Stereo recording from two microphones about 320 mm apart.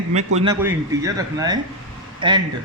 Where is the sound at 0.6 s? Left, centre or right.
Centre.